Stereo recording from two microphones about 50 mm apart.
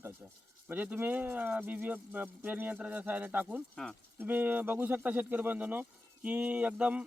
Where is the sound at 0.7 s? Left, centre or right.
Right.